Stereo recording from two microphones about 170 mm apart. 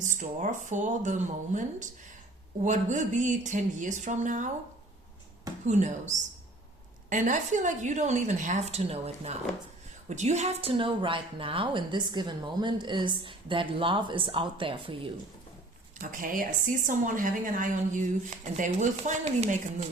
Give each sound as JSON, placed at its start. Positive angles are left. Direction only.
{"t": 0.0, "sound": "a woman's voice", "side_deg": -45}
{"t": 5.6, "sound": "a woman's voice", "side_deg": -45}
{"t": 16.0, "sound": "a woman's voice", "side_deg": -50}